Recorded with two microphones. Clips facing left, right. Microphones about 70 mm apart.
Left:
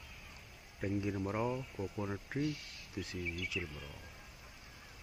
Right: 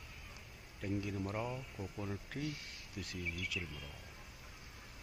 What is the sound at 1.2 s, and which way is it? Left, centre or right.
Speech, centre.